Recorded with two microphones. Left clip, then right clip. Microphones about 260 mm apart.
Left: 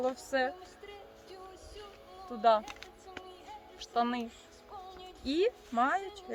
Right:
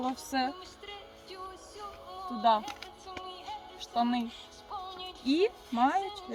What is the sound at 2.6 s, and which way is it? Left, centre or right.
Speech, centre.